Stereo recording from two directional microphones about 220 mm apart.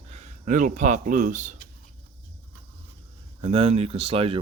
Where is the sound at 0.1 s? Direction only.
35° right (ahead or behind).